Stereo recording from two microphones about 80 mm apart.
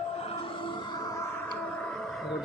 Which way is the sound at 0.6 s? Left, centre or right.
Left.